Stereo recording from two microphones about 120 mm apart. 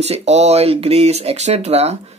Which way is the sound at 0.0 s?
65° right (ahead or behind).